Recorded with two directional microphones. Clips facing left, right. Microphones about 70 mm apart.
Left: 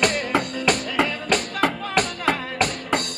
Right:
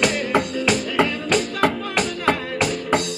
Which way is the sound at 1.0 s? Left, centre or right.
Centre.